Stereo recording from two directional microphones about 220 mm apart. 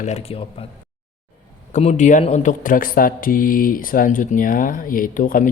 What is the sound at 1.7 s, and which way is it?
Speech, 30° left (ahead or behind).